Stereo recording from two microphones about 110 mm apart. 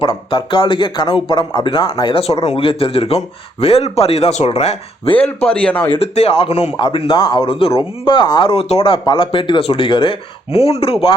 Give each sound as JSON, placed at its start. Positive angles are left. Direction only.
{"t": 0.0, "sound": "speech", "side_deg": 50}
{"t": 2.2, "sound": "speech", "side_deg": 70}
{"t": 5.4, "sound": "speech", "side_deg": 10}
{"t": 5.9, "sound": "speech", "side_deg": 65}
{"t": 6.7, "sound": "speech", "side_deg": 45}
{"t": 8.0, "sound": "speech", "side_deg": 45}